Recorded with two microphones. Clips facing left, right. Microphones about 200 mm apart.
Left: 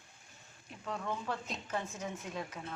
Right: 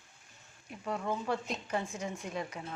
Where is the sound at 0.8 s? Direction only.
10° right (ahead or behind).